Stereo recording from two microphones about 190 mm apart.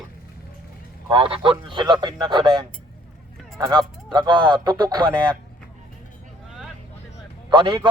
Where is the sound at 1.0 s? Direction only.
30° right (ahead or behind).